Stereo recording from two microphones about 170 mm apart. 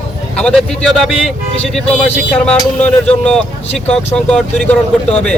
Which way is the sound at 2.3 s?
5° left (ahead or behind).